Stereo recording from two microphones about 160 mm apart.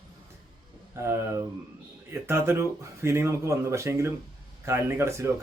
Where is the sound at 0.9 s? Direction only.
15° right (ahead or behind).